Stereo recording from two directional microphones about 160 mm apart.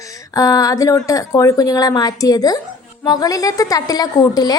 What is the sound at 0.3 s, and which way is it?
A woman's voice, 20° left (ahead or behind).